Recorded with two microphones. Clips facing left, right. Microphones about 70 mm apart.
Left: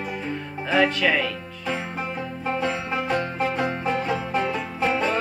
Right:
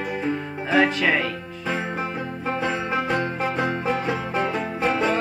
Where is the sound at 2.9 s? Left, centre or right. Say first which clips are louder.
Right 1 dB; centre.